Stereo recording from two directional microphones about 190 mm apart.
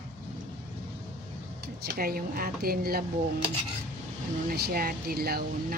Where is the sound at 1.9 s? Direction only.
50° right (ahead or behind).